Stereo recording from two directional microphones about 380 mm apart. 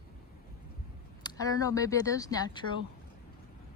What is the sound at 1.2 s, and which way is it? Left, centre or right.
Speech, centre.